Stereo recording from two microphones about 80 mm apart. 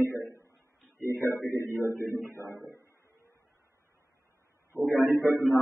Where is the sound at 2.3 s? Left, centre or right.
Left.